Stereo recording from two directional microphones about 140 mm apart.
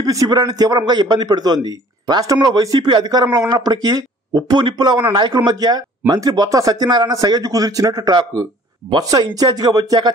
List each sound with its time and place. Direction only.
0.0 s a man's voice: 25° right (ahead or behind)